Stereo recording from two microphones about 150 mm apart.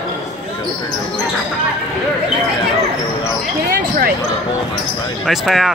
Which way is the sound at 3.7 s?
80° right.